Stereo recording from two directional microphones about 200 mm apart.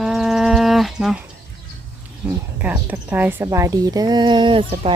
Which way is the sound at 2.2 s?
10° right (ahead or behind).